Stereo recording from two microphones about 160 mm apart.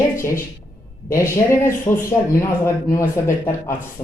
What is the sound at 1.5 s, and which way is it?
Speech, 15° left (ahead or behind).